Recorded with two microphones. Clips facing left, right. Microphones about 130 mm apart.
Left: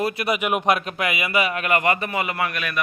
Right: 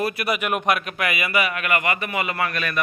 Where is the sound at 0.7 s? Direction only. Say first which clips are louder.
Left 1 dB; 30° left (ahead or behind).